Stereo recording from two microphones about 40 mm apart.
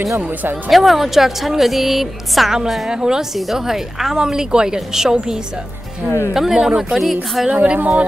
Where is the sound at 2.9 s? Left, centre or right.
Centre.